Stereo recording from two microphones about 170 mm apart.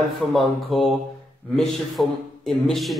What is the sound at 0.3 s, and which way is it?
Speech, centre (ahead or behind).